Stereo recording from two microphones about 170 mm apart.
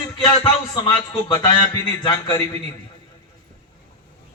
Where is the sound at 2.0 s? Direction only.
25° left (ahead or behind).